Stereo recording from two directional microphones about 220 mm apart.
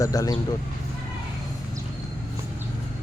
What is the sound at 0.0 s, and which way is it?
Speech, 15° left (ahead or behind).